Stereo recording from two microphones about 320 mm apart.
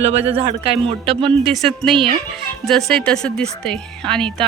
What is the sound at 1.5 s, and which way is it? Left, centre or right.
Speech, centre.